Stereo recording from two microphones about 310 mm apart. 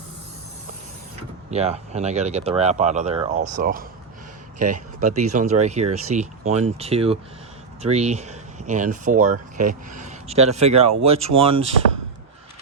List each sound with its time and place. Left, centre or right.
1.5 s speech: right
4.5 s a man's voice: right
4.9 s speech: right